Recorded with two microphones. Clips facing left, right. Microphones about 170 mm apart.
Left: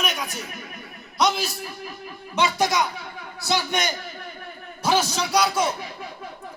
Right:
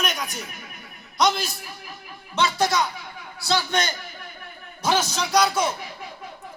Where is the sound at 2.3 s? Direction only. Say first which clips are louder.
Even; 15° left (ahead or behind).